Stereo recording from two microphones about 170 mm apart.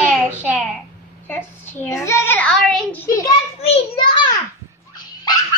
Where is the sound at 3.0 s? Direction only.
20° left (ahead or behind).